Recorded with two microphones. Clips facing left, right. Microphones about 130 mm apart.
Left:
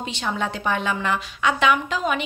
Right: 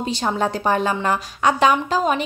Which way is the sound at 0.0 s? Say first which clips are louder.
Right 5 dB; 40° right (ahead or behind).